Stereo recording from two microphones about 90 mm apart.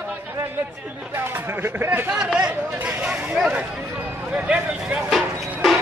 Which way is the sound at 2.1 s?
10° right (ahead or behind).